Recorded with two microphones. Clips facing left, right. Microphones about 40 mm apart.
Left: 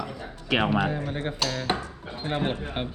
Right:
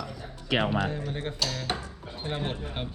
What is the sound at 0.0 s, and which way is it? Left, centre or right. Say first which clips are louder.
Music: left 4 dB; left.